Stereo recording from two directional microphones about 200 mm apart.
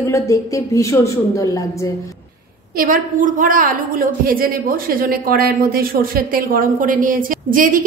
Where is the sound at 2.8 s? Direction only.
40° right (ahead or behind).